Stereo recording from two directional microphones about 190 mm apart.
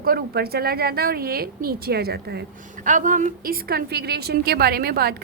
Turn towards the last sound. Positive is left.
turn(degrees=-55)  # may be behind; listen again after turning